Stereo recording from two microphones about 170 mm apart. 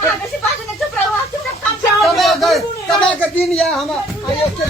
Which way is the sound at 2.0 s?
Centre (ahead or behind).